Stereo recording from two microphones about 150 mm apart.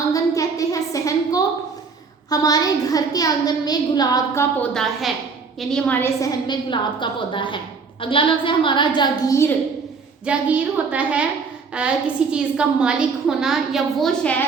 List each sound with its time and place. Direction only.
0.1 s a sound: 25° left (ahead or behind)
2.3 s a woman's voice: 25° left (ahead or behind)
4.6 s a woman's voice: 5° left (ahead or behind); by 9.5 s 20° left (ahead or behind)
10.2 s a woman's voice: 10° right (ahead or behind)